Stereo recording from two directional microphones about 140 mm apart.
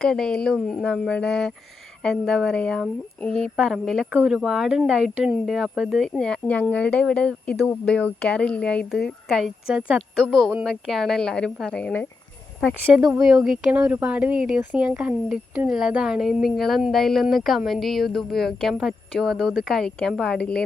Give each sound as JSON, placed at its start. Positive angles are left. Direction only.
{"t": 0.0, "sound": "speech", "side_deg": 5}
{"t": 13.0, "sound": "speech", "side_deg": -25}
{"t": 13.2, "sound": "speech", "side_deg": -5}